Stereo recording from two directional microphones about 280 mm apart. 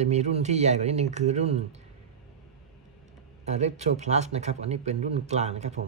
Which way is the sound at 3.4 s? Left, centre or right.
Right.